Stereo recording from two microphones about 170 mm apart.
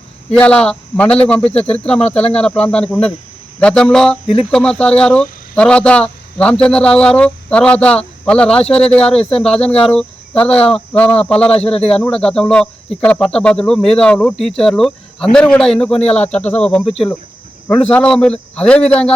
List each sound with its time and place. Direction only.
0.3 s speech: 5° left (ahead or behind)
11.5 s speech: 35° left (ahead or behind)
11.9 s speech: 5° left (ahead or behind)
17.9 s speech: 5° left (ahead or behind)